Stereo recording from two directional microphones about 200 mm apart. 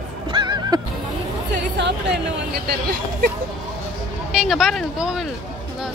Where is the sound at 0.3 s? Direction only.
20° right (ahead or behind).